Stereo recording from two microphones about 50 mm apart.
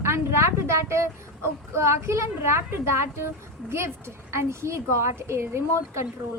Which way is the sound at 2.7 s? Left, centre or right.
Right.